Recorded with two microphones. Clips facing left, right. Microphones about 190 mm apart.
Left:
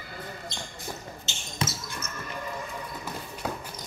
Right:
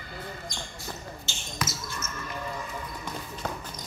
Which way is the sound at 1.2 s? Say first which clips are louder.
Left 3 dB; 30° left (ahead or behind).